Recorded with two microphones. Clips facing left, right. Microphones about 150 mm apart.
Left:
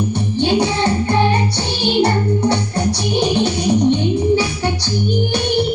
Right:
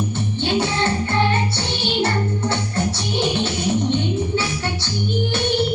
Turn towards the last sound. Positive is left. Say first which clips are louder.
# left 6 dB
turn(degrees=15)  # may be behind; listen again after turning